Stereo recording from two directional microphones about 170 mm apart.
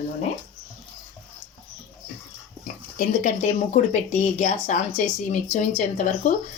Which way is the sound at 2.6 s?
50° left (ahead or behind).